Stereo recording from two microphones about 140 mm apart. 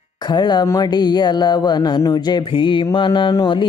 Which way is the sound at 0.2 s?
30° left (ahead or behind).